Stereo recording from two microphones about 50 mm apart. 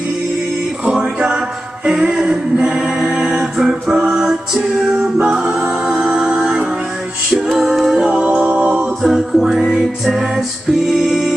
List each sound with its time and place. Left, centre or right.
0.8 s music: centre
8.1 s music: right
9.0 s music: centre